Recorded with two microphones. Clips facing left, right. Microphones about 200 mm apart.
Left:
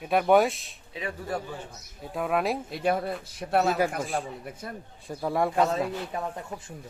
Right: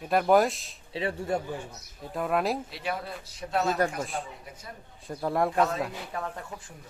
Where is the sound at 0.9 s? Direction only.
30° right (ahead or behind).